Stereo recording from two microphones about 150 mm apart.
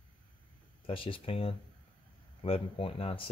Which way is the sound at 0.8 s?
35° left (ahead or behind).